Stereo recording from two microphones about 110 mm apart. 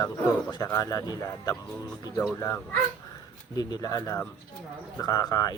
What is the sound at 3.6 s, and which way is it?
Speech, 35° left (ahead or behind).